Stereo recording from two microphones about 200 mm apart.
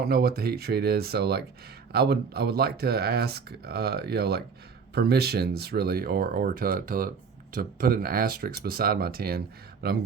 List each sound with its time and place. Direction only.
0.0 s speech: 50° right (ahead or behind)